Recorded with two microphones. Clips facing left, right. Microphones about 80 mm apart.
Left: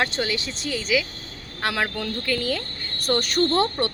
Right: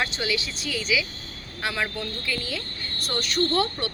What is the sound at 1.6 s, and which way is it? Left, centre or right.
Speech, left.